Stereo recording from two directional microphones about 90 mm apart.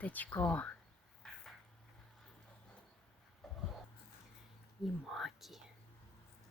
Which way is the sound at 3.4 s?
Centre (ahead or behind).